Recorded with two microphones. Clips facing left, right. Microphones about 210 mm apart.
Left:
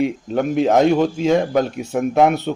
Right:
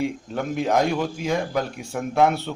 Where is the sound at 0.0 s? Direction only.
20° left (ahead or behind).